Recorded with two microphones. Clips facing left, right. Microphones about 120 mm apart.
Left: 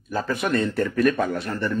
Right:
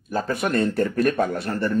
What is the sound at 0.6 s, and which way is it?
Speech, 55° right (ahead or behind).